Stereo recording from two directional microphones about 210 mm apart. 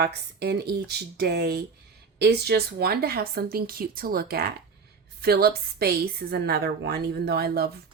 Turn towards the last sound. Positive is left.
turn(degrees=-50)  # may be behind; listen again after turning